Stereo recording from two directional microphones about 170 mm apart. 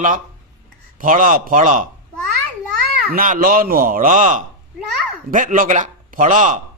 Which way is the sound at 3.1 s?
55° right (ahead or behind).